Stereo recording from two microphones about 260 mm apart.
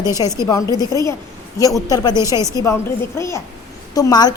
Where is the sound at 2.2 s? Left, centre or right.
Centre.